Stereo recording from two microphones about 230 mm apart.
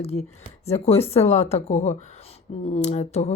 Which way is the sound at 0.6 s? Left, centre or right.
Left.